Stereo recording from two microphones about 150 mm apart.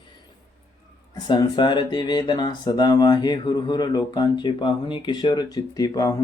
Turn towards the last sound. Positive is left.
turn(degrees=25)  # may be behind; listen again after turning